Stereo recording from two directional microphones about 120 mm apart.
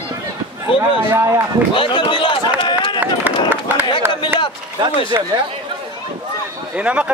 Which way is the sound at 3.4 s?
15° right (ahead or behind).